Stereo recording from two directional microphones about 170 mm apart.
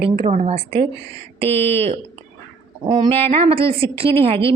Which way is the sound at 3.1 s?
35° right (ahead or behind).